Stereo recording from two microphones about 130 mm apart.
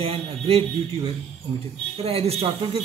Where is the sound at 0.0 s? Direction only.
50° right (ahead or behind).